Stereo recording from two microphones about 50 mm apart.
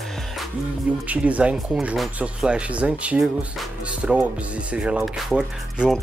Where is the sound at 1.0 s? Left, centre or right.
Right.